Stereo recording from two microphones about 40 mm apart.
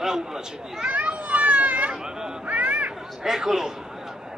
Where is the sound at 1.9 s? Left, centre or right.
Centre.